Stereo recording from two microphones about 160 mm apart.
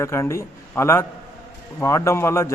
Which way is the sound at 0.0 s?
15° left (ahead or behind).